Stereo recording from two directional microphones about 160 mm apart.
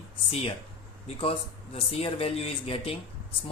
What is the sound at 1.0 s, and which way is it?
Speech, 35° left (ahead or behind).